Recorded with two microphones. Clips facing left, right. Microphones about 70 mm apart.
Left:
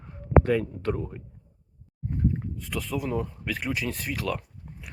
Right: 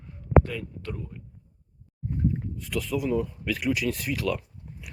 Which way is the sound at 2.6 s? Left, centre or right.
Left.